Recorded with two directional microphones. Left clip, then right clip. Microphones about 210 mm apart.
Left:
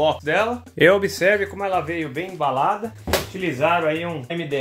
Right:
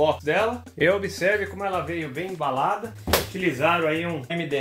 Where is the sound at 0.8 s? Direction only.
45° left (ahead or behind).